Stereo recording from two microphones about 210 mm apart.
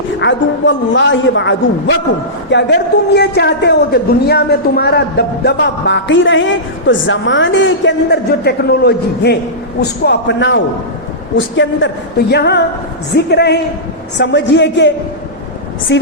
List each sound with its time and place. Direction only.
0.2 s a man's voice: 60° left (ahead or behind)
15.9 s a man's voice: 55° left (ahead or behind)